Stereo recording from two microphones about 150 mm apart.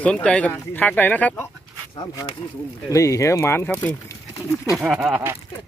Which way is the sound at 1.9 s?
25° left (ahead or behind).